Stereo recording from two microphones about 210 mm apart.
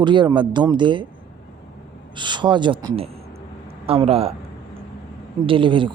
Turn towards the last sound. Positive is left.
turn(degrees=-25)  # may be behind; listen again after turning